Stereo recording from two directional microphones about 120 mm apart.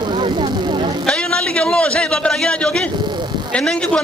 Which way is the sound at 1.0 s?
10° left (ahead or behind).